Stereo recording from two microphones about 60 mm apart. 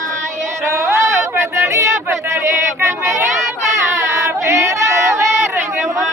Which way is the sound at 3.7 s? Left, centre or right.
Right.